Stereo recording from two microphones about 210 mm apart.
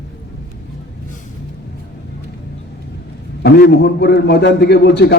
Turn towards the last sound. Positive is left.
turn(degrees=50)  # may be behind; listen again after turning